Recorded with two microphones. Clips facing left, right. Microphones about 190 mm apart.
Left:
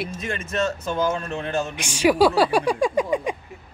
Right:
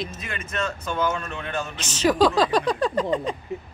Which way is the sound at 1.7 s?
10° left (ahead or behind).